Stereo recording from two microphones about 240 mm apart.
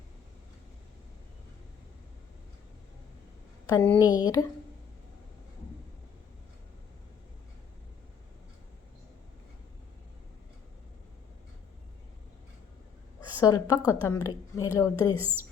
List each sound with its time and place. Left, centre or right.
3.7 s a woman's voice: centre
13.4 s a woman's voice: centre
15.2 s a woman's voice: centre